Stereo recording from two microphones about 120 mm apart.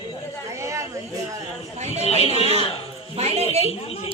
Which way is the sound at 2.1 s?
60° left (ahead or behind).